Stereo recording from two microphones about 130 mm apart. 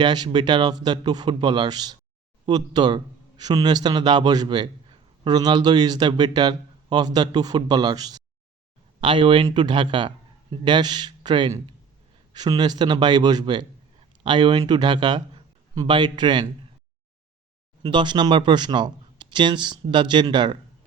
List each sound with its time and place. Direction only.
0.0 s a man's voice: 35° right (ahead or behind)
17.8 s a man's voice: 35° right (ahead or behind)